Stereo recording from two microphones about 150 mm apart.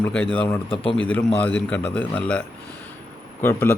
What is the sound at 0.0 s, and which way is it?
Speech, 10° left (ahead or behind).